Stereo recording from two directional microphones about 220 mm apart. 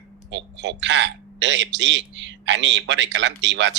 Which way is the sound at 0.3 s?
55° right (ahead or behind).